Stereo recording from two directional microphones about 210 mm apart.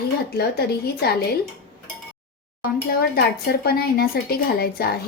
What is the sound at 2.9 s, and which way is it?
Speech, 45° left (ahead or behind).